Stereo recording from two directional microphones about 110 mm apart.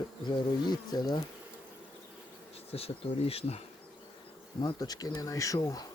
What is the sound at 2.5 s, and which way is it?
Bee, 65° left (ahead or behind).